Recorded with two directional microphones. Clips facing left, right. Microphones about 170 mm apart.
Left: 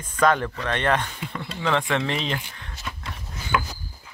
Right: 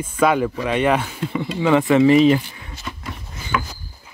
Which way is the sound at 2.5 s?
5° right (ahead or behind).